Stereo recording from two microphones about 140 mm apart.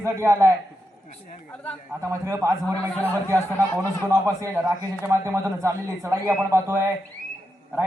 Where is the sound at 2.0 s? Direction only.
20° right (ahead or behind).